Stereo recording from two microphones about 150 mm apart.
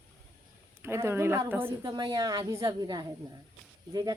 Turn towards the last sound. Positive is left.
turn(degrees=-25)  # may be behind; listen again after turning